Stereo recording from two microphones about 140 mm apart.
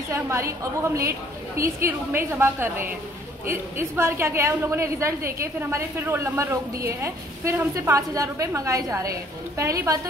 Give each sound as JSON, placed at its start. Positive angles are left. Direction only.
{"t": 0.1, "sound": "a woman's voice", "side_deg": -20}